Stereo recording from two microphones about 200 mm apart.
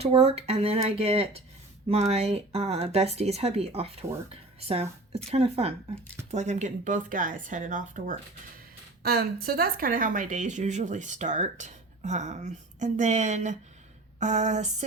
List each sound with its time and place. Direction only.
0.0 s speech: 30° right (ahead or behind)